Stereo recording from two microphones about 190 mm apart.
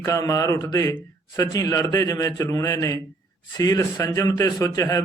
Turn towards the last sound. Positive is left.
turn(degrees=15)  # may be behind; listen again after turning